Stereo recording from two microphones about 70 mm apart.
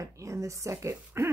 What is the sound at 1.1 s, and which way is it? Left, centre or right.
Owl, right.